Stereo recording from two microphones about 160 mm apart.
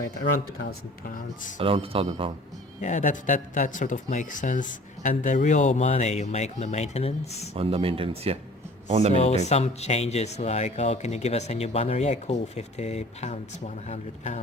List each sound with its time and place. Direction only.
0.7 s speech: 60° left (ahead or behind)
1.5 s speech: 35° right (ahead or behind)
2.8 s speech: 50° left (ahead or behind)
7.5 s speech: 35° right (ahead or behind)
9.5 s speech: 40° left (ahead or behind)